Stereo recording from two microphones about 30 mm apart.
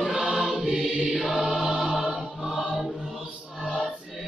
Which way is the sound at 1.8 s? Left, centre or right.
Centre.